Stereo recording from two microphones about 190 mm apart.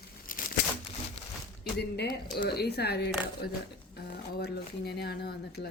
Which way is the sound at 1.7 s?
60° left (ahead or behind).